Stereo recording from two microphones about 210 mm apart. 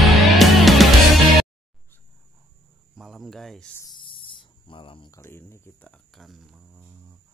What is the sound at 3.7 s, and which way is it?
Snake, 20° left (ahead or behind).